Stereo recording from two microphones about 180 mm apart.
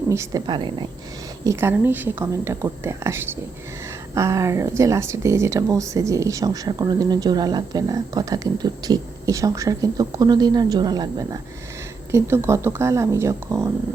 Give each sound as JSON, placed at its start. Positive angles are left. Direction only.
{"t": 0.1, "sound": "speech", "side_deg": -15}
{"t": 1.5, "sound": "a woman's voice", "side_deg": -15}